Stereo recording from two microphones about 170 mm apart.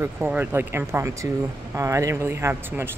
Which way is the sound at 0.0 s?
10° right (ahead or behind).